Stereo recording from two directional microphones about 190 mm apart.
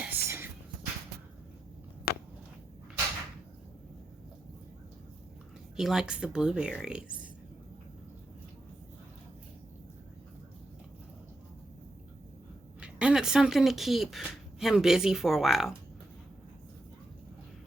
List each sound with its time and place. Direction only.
0.0 s whispering: 10° right (ahead or behind)
2.1 s a sound: 55° left (ahead or behind)
5.7 s speech: centre (ahead or behind)
12.8 s speech: 5° right (ahead or behind)